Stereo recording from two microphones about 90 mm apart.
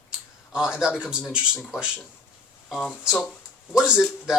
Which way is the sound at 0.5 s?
10° right (ahead or behind).